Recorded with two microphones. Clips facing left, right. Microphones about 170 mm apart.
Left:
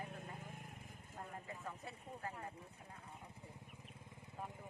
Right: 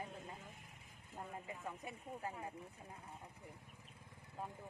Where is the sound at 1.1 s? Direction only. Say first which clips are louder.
Right 2 dB; 15° right (ahead or behind).